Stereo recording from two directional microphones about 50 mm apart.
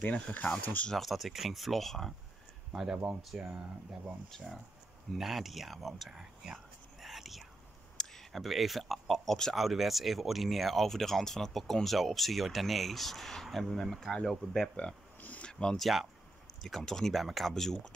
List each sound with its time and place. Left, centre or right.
0.0 s speech: left
0.9 s speech: centre
2.7 s speech: centre
5.1 s speech: centre
9.6 s speech: centre
14.8 s speech: left
16.6 s speech: centre